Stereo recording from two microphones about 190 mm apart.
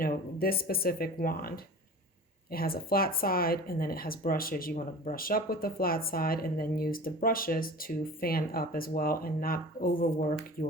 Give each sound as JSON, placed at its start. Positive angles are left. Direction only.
{"t": 0.0, "sound": "speech", "side_deg": 50}